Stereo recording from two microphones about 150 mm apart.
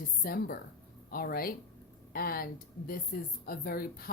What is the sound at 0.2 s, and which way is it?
A woman's voice, 85° left.